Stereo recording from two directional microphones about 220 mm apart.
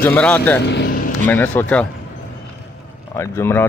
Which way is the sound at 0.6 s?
50° left (ahead or behind).